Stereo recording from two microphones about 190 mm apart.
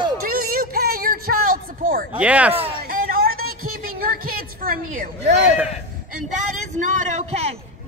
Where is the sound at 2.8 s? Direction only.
50° right (ahead or behind).